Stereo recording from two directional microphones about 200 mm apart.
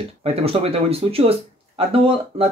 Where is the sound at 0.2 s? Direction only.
30° right (ahead or behind).